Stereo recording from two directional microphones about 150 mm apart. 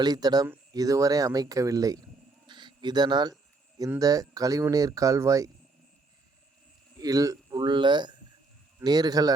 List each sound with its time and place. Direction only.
0.0 s speech: 25° right (ahead or behind)
2.5 s bird: 30° right (ahead or behind)
3.8 s speech: 20° right (ahead or behind)
7.0 s speech: 25° right (ahead or behind)